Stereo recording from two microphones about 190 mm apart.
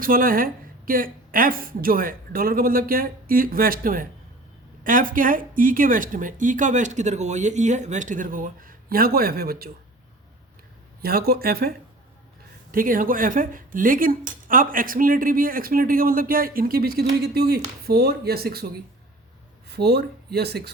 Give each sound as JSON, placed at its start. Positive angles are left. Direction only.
{"t": 0.0, "sound": "speech", "side_deg": -50}
{"t": 11.0, "sound": "speech", "side_deg": -50}
{"t": 12.7, "sound": "speech", "side_deg": -45}
{"t": 19.6, "sound": "speech", "side_deg": -55}